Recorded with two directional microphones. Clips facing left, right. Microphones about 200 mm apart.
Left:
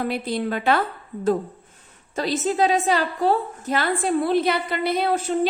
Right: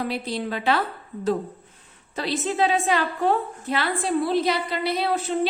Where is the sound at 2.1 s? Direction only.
45° left (ahead or behind).